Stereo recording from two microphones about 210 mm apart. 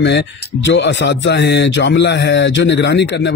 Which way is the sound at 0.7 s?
60° left (ahead or behind).